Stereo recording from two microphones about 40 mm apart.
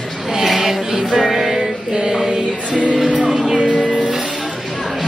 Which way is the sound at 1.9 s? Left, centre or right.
Centre.